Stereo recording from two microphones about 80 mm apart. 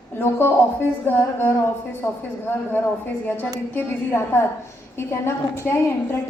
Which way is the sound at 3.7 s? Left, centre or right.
Left.